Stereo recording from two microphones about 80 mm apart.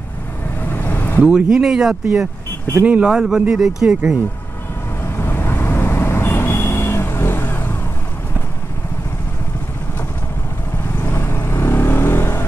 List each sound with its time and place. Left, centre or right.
0.6 s vehicle: left
1.2 s speech: centre
2.8 s speech: centre
5.0 s vehicle: left
11.0 s vehicle: left